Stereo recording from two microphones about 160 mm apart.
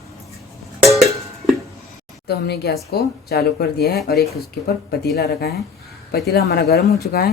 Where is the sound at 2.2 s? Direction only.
90° left.